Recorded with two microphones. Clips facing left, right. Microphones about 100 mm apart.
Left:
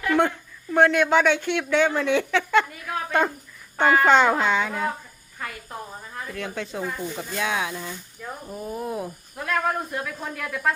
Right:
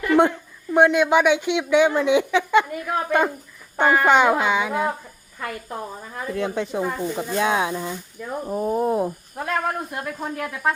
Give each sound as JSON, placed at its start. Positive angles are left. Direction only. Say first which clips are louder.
{"t": 0.2, "sound": "a woman's voice", "louder": "right 4 dB", "side_deg": -20}
{"t": 6.3, "sound": "speech", "louder": "right 7 dB", "side_deg": -25}
{"t": 8.4, "sound": "speech", "louder": "right 10 dB", "side_deg": -40}
{"t": 10.4, "sound": "speech", "louder": "right 1 dB", "side_deg": -15}